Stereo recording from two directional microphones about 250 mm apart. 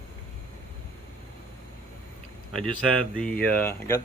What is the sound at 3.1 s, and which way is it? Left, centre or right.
Speech, centre.